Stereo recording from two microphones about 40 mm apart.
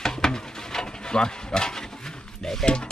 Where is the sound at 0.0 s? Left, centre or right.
Centre.